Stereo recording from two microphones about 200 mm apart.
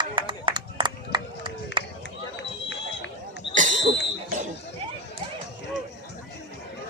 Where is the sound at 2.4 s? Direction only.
65° left (ahead or behind).